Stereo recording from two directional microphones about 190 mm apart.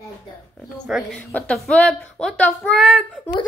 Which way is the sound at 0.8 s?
Centre (ahead or behind).